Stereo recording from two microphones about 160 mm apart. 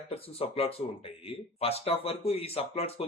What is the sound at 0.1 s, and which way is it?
Speech, 35° left (ahead or behind).